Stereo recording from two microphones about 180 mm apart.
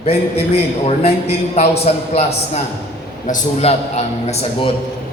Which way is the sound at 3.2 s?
40° left (ahead or behind).